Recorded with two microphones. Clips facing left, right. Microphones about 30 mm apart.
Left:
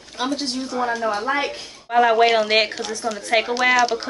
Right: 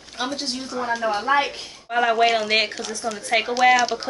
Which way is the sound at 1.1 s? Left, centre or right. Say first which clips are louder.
Right 2 dB; centre.